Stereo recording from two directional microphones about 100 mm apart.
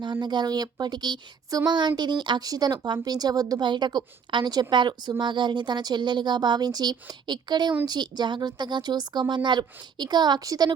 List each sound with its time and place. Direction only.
0.0 s speech: 45° right (ahead or behind)